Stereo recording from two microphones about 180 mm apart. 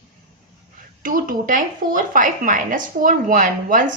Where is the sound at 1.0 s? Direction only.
50° right (ahead or behind).